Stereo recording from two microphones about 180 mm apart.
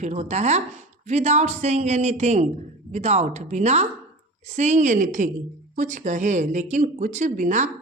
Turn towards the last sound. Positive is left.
turn(degrees=-40)  # may be behind; listen again after turning